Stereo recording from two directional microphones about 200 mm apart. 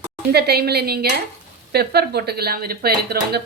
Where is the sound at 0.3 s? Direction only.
50° right (ahead or behind).